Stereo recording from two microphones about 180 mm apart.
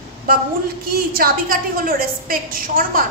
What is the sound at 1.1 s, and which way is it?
A woman's voice, 55° right (ahead or behind).